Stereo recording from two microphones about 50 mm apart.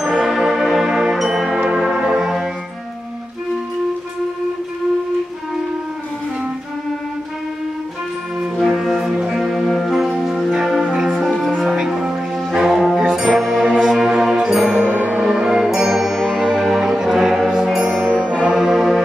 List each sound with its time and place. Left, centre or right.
0.0 s music: centre
8.5 s music: centre
13.4 s brass instrument: centre
13.7 s orchestra: centre
14.8 s music: right
18.4 s brass instrument: centre
18.7 s music: centre